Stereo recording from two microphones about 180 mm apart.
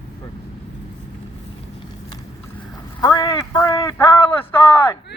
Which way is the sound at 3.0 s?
20° left (ahead or behind).